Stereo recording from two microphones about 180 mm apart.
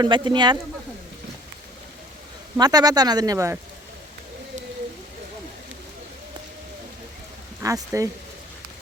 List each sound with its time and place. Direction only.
0.0 s speech: 25° right (ahead or behind)
2.6 s speech: 20° right (ahead or behind)
7.6 s speech: 15° right (ahead or behind)